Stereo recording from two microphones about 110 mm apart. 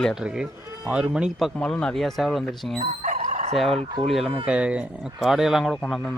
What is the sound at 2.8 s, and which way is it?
Fowl, 80° right.